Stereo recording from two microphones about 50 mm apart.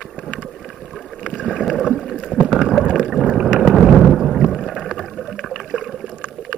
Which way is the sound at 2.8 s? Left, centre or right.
Right.